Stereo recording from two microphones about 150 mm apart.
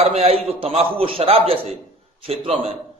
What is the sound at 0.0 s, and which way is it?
A man's voice, 45° right (ahead or behind).